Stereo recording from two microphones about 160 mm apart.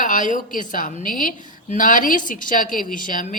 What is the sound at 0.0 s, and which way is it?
A woman's voice, 55° left (ahead or behind).